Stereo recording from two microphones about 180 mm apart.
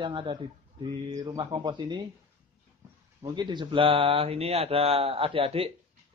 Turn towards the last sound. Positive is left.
turn(degrees=-30)  # may be behind; listen again after turning